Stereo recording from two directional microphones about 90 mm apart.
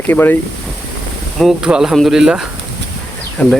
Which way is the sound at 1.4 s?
5° right (ahead or behind).